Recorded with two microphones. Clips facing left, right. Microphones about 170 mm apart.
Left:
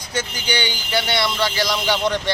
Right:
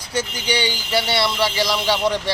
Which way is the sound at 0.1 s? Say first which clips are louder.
Right 2 dB; 30° right (ahead or behind).